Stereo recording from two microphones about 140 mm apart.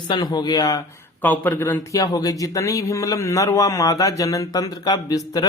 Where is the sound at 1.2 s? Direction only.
15° left (ahead or behind).